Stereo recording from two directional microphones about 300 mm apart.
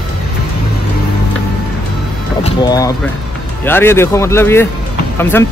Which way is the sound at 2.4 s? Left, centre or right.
Centre.